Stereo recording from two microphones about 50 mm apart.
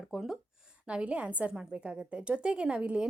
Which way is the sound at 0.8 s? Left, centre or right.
Right.